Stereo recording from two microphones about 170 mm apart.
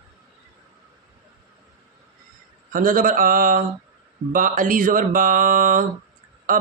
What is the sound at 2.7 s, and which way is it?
Mantra, 55° right (ahead or behind).